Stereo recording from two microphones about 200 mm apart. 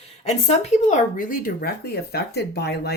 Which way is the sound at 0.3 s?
35° left (ahead or behind).